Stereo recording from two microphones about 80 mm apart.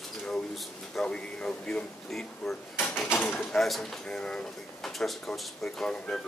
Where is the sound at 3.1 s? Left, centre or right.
Left.